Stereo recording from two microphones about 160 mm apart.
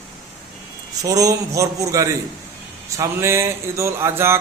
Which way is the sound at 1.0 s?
20° right (ahead or behind).